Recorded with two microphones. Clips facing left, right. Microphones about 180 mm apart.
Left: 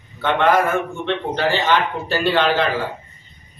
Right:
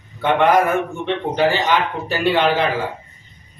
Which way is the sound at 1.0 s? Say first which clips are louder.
Right 5 dB; 15° right (ahead or behind).